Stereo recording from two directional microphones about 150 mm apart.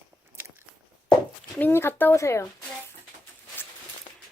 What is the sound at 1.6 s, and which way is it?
Speech, 15° left (ahead or behind).